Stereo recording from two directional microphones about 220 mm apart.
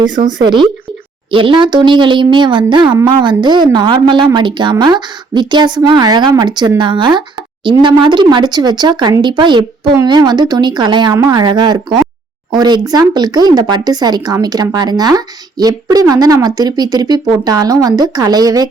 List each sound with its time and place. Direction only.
0.3 s a woman's voice: 20° right (ahead or behind)